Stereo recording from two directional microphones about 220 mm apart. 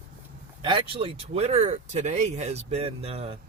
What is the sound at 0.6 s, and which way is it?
Speech, 20° right (ahead or behind).